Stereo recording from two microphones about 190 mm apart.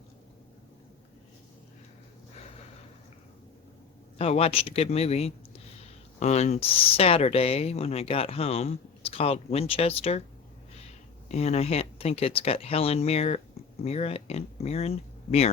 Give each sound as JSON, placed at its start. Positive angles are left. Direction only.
{"t": 4.2, "sound": "speech", "side_deg": 30}
{"t": 11.3, "sound": "speech", "side_deg": 35}